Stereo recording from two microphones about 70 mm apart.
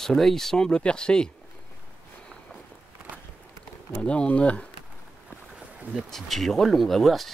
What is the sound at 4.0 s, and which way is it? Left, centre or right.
Speech, centre.